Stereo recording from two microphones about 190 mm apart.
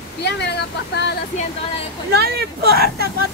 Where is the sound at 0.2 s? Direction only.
60° left (ahead or behind).